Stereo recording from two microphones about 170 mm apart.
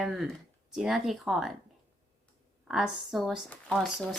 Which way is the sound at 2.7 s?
5° right (ahead or behind).